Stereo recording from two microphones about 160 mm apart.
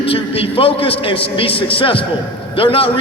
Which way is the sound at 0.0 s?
35° left (ahead or behind).